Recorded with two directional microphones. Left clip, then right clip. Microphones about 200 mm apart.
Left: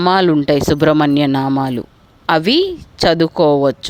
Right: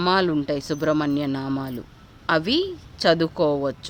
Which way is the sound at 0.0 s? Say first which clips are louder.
Left 8 dB; 40° left (ahead or behind).